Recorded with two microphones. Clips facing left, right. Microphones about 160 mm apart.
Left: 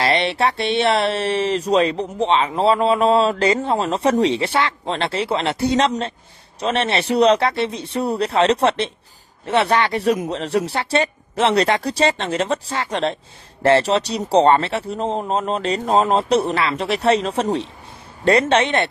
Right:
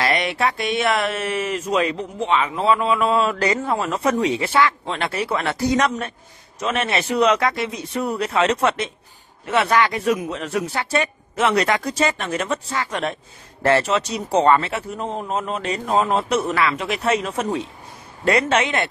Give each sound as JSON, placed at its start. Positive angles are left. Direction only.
{"t": 0.0, "sound": "a man's voice", "side_deg": 30}